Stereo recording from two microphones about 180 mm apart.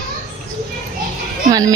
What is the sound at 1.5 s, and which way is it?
Speech, 20° right (ahead or behind).